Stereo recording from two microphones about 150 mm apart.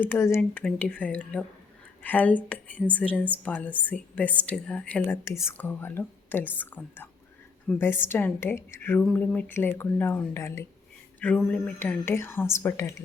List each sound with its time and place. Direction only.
0.0 s a woman's voice: 15° left (ahead or behind)